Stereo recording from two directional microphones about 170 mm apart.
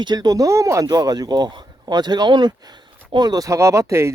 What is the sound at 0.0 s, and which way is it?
Speech, 25° right (ahead or behind).